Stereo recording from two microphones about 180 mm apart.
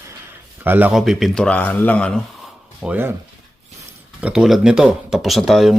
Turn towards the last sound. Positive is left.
turn(degrees=0)  # may be behind; listen again after turning